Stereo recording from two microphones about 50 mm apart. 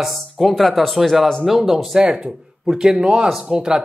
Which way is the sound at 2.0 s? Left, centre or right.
Right.